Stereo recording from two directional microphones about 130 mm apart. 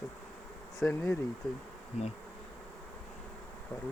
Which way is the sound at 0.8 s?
15° left (ahead or behind).